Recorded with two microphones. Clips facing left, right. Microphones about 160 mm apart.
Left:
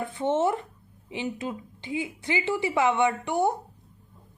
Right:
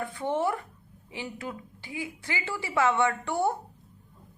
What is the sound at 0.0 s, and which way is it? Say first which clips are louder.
A woman's voice: left 4 dB; 20° left (ahead or behind).